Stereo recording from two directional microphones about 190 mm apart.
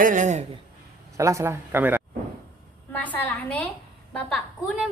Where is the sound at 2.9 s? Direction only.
10° left (ahead or behind).